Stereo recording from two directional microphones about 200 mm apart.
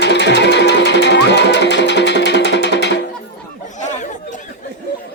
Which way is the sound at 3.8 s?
35° left (ahead or behind).